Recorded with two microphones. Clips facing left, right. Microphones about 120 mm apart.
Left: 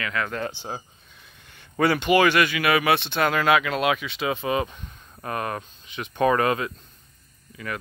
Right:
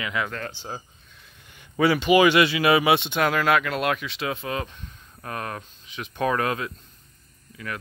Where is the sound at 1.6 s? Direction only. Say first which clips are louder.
Right 1 dB; 5° right (ahead or behind).